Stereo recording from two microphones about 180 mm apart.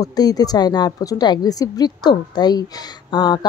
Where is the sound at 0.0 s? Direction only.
20° left (ahead or behind).